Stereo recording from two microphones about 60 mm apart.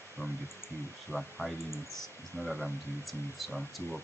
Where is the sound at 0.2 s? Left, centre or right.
Left.